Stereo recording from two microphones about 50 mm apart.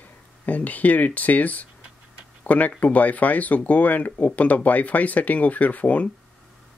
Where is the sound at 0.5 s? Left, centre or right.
Left.